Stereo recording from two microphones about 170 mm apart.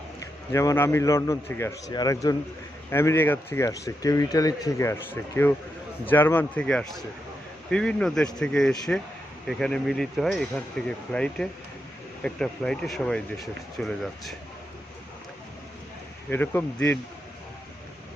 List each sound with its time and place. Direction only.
0.2 s speech: 20° left (ahead or behind); by 14.3 s centre (ahead or behind)
16.3 s speech: 10° left (ahead or behind)